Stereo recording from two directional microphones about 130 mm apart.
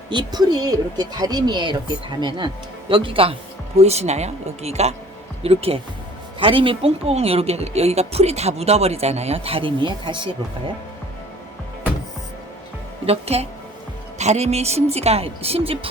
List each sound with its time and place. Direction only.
0.1 s speech: 35° right (ahead or behind)
2.9 s speech: 40° right (ahead or behind)
3.8 s a woman's voice: 55° right (ahead or behind); by 10.2 s 35° right (ahead or behind)
13.1 s a woman's voice: 50° right (ahead or behind)